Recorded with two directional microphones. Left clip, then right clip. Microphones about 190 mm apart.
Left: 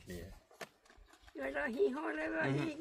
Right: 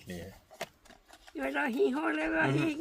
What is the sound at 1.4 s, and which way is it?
Speech, 50° right (ahead or behind).